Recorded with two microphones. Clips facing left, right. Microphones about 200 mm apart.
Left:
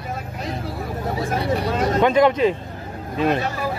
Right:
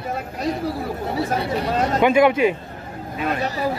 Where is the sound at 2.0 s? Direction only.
10° right (ahead or behind).